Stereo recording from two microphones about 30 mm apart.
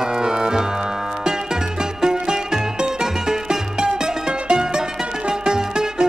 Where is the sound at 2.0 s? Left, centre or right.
Right.